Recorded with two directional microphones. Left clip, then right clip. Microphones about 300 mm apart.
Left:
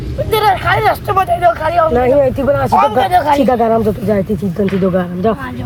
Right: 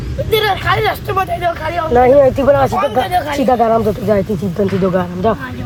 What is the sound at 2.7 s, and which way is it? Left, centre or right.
Speech, centre.